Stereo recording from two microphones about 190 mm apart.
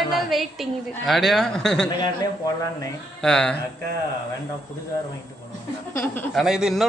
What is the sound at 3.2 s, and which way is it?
Speech, 5° left (ahead or behind).